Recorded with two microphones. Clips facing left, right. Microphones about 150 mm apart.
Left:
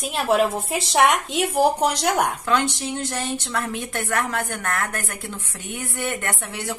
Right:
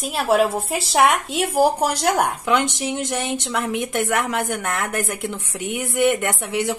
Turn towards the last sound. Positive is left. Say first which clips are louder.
# right 6 dB
turn(degrees=-20)  # may be behind; listen again after turning